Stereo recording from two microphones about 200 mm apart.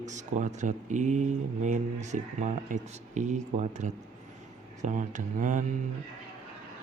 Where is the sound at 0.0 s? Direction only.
35° right (ahead or behind).